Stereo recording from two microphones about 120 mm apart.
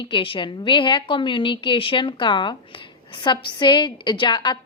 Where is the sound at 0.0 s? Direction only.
45° left (ahead or behind).